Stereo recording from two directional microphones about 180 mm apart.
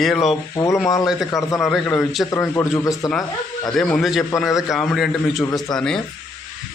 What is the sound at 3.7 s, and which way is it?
A man's voice, 5° left (ahead or behind).